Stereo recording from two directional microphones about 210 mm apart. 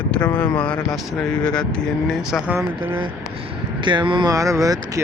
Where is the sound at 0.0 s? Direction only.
5° left (ahead or behind).